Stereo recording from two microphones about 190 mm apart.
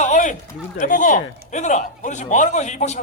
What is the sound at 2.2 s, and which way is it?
Speech, 40° left (ahead or behind).